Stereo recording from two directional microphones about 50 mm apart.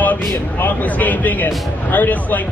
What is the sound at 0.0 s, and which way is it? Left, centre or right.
Speech, left.